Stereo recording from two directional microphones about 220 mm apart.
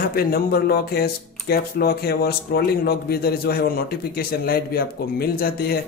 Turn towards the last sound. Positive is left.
turn(degrees=45)  # may be behind; listen again after turning